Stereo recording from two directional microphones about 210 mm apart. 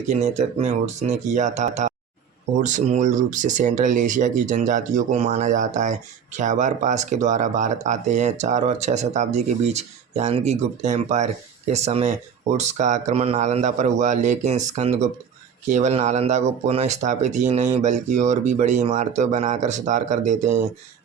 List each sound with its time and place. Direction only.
0.1 s speech: 30° right (ahead or behind)